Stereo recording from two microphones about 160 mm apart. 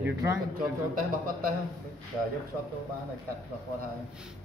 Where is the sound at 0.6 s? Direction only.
65° right (ahead or behind).